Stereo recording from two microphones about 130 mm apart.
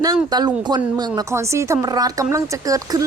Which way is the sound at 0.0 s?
30° right (ahead or behind).